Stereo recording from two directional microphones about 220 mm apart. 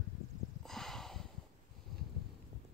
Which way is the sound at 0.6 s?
Centre (ahead or behind).